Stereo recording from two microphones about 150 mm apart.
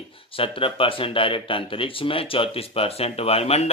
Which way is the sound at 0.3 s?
35° left (ahead or behind).